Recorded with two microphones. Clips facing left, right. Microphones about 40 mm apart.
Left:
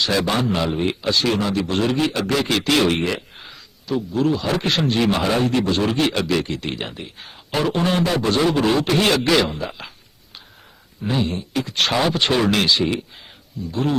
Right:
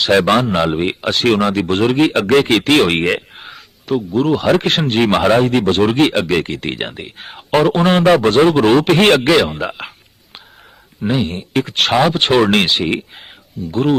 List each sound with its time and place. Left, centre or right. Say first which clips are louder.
0.0 s a man's voice: right 7 dB; right
11.1 s a man's voice: right 4 dB; right
11.9 s speech: right 7 dB; right